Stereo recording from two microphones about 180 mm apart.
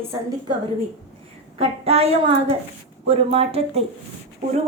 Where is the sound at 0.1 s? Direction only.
20° right (ahead or behind).